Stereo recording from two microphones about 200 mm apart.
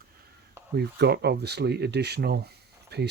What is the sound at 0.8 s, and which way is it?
Speech, 55° right (ahead or behind).